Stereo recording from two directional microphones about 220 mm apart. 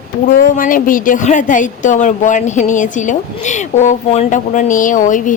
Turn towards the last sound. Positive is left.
turn(degrees=35)  # may be behind; listen again after turning